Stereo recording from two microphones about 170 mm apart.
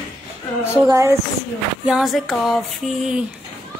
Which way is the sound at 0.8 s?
15° right (ahead or behind).